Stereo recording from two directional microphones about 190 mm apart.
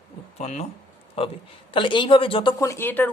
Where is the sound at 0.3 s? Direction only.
35° left (ahead or behind).